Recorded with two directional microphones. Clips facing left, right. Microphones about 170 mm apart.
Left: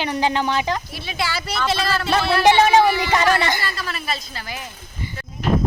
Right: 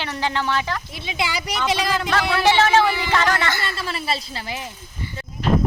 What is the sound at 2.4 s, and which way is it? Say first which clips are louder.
Speech: left 3 dB; 15° left (ahead or behind).